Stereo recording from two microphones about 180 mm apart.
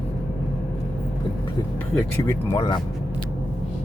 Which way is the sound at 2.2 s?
15° left (ahead or behind).